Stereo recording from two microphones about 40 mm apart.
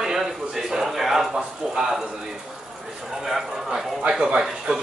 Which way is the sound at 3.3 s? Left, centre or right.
Centre.